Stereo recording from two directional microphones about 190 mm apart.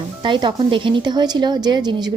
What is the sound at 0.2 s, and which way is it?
A woman's voice, 25° right (ahead or behind).